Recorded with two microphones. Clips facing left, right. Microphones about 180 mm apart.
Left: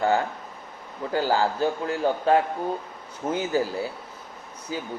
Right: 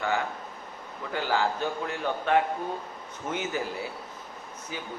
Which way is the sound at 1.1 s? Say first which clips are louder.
Left 4 dB; 35° left (ahead or behind).